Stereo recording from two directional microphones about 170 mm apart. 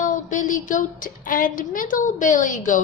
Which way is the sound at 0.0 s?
50° left (ahead or behind).